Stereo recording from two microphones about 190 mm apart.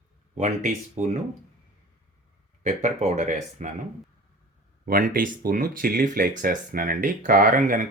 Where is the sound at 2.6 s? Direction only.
40° right (ahead or behind).